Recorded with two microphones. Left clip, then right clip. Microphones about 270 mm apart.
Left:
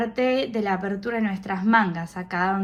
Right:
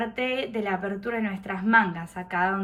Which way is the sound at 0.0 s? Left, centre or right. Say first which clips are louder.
Left 5 dB; centre.